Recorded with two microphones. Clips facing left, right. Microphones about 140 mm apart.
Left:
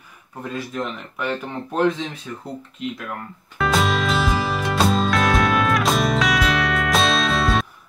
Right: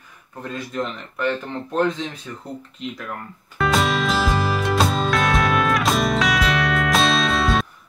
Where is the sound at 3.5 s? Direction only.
Centre (ahead or behind).